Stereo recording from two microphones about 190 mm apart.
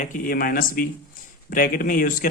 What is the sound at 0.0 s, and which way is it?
A man's voice, 45° left (ahead or behind).